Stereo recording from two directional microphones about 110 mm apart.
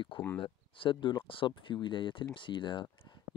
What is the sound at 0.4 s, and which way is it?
Speech, 50° left (ahead or behind).